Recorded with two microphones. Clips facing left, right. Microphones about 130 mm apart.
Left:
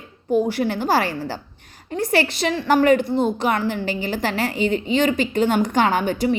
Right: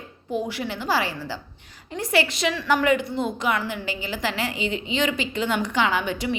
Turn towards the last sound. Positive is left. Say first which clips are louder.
# left 5 dB
turn(degrees=45)  # may be behind; listen again after turning